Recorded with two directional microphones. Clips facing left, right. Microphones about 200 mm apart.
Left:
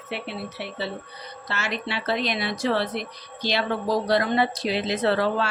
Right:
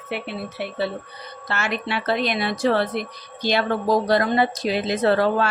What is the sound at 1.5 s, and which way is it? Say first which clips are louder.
A woman's voice: right 4 dB; 55° right (ahead or behind).